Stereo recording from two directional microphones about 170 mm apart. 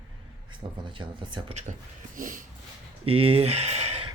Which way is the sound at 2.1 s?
50° right (ahead or behind).